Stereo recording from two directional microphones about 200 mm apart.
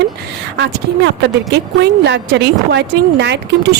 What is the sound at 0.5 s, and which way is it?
A woman's voice, 60° right (ahead or behind).